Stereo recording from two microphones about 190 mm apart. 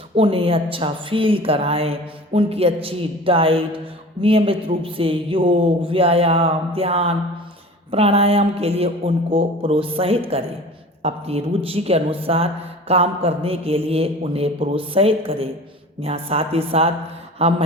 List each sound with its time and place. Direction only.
0.2 s a woman's voice: 30° right (ahead or behind)